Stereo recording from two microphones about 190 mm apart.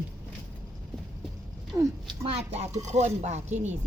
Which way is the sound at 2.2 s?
30° right (ahead or behind).